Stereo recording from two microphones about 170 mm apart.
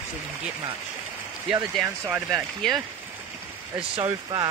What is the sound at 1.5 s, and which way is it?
Speech, 10° right (ahead or behind).